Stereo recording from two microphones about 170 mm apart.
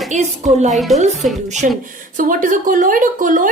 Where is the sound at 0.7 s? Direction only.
Centre (ahead or behind).